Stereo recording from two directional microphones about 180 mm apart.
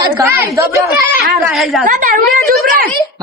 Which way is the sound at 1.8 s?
50° right (ahead or behind).